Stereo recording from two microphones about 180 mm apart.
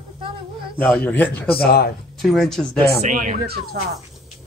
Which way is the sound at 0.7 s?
5° left (ahead or behind).